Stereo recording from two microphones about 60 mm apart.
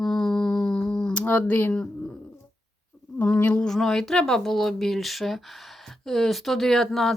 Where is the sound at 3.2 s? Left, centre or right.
Left.